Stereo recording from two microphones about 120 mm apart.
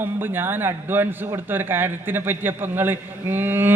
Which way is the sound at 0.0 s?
20° right (ahead or behind).